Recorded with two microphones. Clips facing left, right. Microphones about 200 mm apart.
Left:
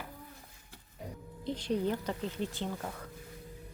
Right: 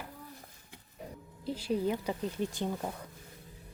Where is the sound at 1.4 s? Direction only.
5° right (ahead or behind).